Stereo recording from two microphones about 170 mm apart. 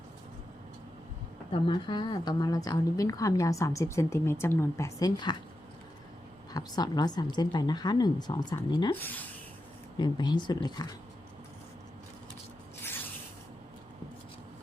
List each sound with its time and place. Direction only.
1.5 s a woman's voice: 30° left (ahead or behind)
6.5 s a woman's voice: 25° left (ahead or behind)
9.0 s speech: 10° left (ahead or behind)
10.0 s a woman's voice: 25° left (ahead or behind)